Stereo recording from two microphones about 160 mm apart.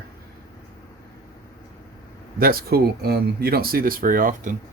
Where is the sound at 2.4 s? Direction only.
70° right (ahead or behind).